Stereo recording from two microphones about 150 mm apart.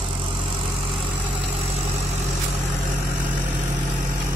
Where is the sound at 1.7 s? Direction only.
45° right (ahead or behind).